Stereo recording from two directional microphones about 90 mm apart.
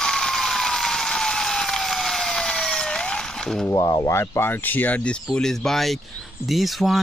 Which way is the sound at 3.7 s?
45° left (ahead or behind).